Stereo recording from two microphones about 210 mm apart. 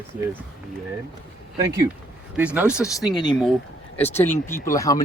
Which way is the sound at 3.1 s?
20° left (ahead or behind).